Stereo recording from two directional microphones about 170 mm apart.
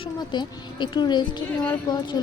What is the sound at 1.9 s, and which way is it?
Speech, 25° left (ahead or behind).